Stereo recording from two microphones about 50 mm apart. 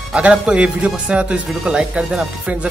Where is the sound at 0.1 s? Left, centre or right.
Right.